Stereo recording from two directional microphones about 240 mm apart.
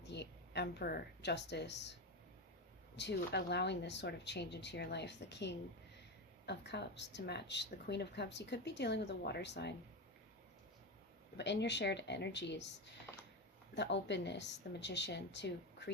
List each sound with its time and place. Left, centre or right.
0.0 s a woman's voice: left
11.3 s speech: left